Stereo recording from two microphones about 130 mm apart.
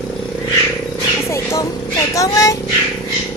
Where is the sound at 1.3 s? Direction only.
20° left (ahead or behind).